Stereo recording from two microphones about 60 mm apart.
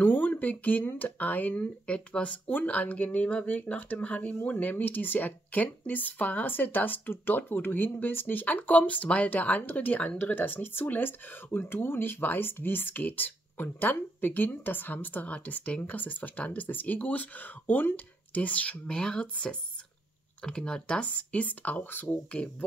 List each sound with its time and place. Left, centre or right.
0.0 s speech: left